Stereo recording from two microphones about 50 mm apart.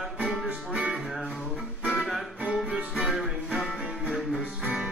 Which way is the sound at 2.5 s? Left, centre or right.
Right.